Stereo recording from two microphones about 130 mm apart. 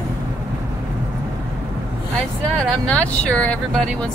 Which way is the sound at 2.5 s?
10° left (ahead or behind).